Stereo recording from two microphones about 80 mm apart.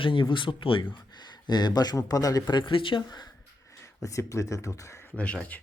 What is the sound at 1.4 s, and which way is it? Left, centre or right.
A man's voice, left.